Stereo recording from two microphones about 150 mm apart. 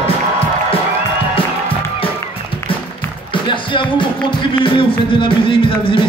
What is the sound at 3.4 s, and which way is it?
Music, 35° left (ahead or behind).